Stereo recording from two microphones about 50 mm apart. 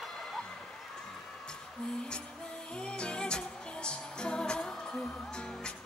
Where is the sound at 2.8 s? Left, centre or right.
Centre.